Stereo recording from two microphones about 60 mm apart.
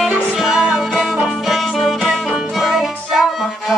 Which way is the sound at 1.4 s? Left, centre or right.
Centre.